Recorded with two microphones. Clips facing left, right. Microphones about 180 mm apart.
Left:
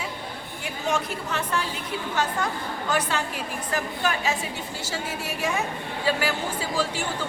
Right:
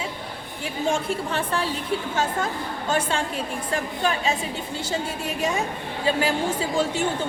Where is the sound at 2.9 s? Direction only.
25° right (ahead or behind).